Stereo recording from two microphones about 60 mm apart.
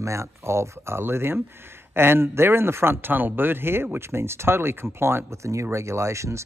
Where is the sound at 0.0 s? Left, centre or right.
Right.